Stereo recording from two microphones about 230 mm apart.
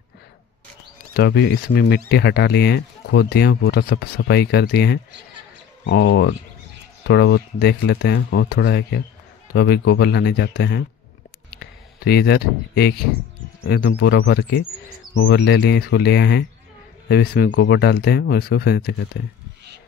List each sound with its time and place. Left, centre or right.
1.1 s speech: left
7.1 s speech: left
11.5 s a sound: left
13.7 s speech: left